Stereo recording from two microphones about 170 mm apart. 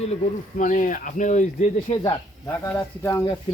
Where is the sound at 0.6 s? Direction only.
50° left (ahead or behind).